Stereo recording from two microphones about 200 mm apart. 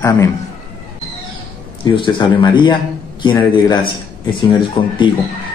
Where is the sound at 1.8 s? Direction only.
25° left (ahead or behind).